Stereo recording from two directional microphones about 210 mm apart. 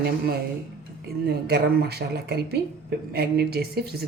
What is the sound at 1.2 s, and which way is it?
Speech, 50° right (ahead or behind).